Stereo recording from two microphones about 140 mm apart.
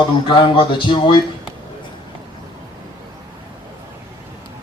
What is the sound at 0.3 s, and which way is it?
Speech, 35° left (ahead or behind).